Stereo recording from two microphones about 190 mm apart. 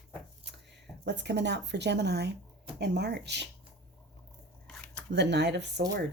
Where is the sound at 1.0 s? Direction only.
65° right (ahead or behind).